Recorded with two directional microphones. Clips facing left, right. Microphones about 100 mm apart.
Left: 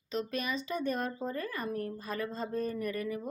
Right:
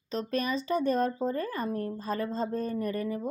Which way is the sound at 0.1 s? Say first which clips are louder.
Right 4 dB; 35° right (ahead or behind).